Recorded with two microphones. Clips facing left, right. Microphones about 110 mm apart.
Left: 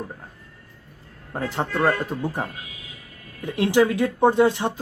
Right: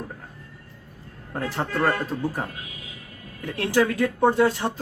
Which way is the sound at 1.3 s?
15° left (ahead or behind).